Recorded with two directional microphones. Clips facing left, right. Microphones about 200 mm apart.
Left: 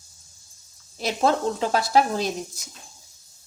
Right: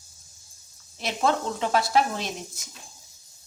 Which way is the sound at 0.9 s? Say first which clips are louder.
Left 3 dB; 35° left (ahead or behind).